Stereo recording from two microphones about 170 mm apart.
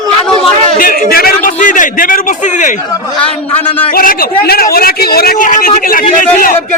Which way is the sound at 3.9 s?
60° left (ahead or behind).